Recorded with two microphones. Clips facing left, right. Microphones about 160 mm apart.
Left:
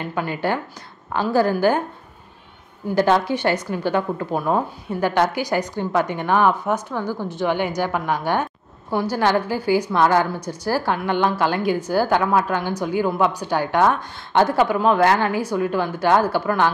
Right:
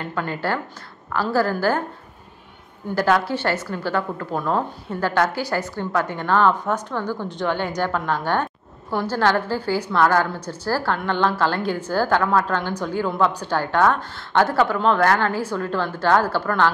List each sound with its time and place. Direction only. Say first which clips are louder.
0.0 s a woman's voice: left 2 dB; 15° left (ahead or behind)
2.9 s a woman's voice: left 2 dB; 20° left (ahead or behind)